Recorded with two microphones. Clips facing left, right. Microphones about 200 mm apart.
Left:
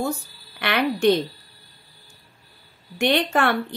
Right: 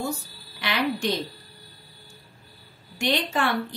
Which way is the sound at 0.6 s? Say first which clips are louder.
Left 4 dB; 60° left (ahead or behind).